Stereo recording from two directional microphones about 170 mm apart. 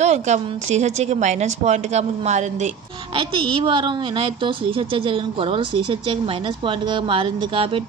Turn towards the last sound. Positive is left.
turn(degrees=-30)  # may be behind; listen again after turning